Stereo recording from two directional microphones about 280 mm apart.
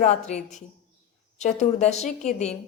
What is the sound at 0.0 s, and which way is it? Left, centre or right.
A woman's voice, left.